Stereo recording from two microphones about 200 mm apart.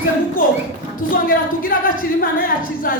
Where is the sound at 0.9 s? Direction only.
45° left (ahead or behind).